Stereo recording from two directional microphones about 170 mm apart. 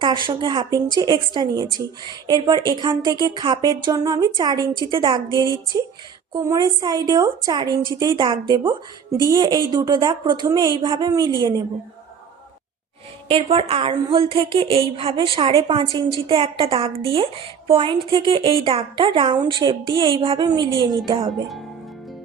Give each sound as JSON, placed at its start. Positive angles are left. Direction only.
{"t": 0.0, "sound": "a woman's voice", "side_deg": -30}
{"t": 13.2, "sound": "a woman's voice", "side_deg": -30}